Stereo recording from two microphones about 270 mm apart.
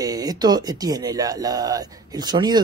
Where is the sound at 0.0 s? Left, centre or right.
Centre.